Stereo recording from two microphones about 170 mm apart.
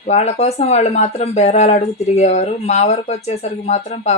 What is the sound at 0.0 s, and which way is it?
Speech, 40° left (ahead or behind).